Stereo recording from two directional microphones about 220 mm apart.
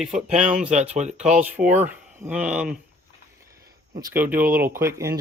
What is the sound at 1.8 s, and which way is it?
Speech, 5° right (ahead or behind).